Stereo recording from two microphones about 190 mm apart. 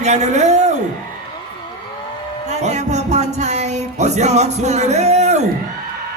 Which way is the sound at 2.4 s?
35° right (ahead or behind).